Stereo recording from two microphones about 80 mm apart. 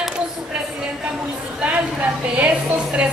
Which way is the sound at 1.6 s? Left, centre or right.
Centre.